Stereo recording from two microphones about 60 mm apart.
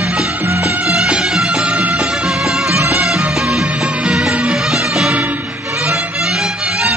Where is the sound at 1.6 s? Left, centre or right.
Centre.